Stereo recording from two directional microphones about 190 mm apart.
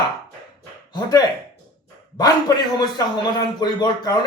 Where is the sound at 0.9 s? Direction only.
20° left (ahead or behind).